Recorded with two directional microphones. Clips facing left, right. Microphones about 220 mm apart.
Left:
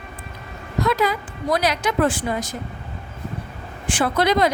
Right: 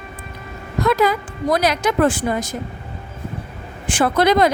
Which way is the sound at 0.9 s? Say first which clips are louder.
Right 5 dB; 50° right (ahead or behind).